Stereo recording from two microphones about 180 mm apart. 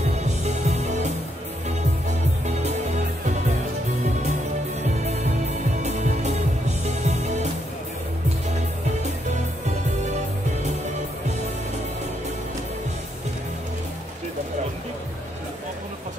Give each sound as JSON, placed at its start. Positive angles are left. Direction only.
{"t": 0.2, "sound": "music", "side_deg": -40}
{"t": 5.0, "sound": "music", "side_deg": -40}